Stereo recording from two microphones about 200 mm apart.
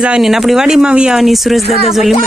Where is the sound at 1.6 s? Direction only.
30° left (ahead or behind).